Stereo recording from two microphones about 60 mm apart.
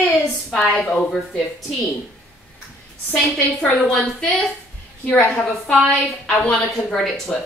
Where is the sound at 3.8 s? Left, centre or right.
Centre.